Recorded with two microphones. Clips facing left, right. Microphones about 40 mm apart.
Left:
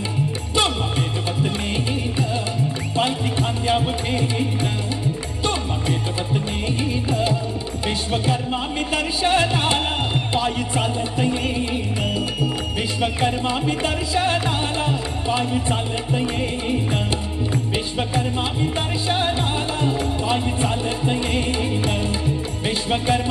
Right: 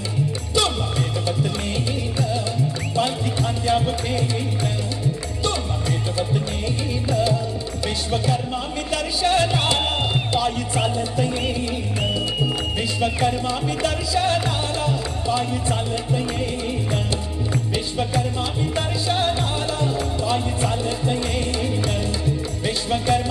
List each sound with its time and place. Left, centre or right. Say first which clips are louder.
2.9 s music: left 2 dB; left
7.1 s music: right 2 dB; left
8.9 s music: even; left
11.3 s music: left 2 dB; left
18.6 s music: left 1 dB; left